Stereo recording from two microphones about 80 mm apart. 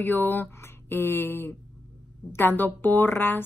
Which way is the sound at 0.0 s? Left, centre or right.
Left.